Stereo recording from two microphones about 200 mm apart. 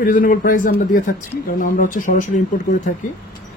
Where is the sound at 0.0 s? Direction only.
40° left (ahead or behind).